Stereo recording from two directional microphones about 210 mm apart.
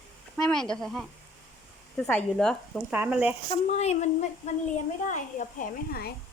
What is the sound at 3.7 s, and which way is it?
Speech, 30° left (ahead or behind).